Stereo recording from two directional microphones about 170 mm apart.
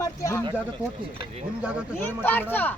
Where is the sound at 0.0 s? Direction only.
20° left (ahead or behind).